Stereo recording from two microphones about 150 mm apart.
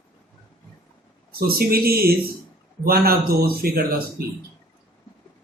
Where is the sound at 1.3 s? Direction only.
90° right.